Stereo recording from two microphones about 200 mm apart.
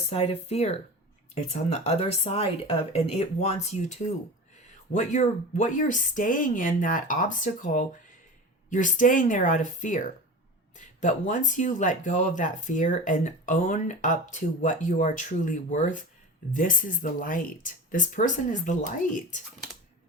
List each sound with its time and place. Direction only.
0.1 s speech: 30° left (ahead or behind)